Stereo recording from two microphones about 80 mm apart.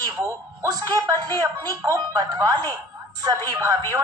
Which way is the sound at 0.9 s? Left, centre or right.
Right.